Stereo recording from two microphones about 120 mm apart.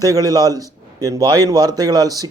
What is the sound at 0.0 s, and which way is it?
A man's voice, 30° right (ahead or behind).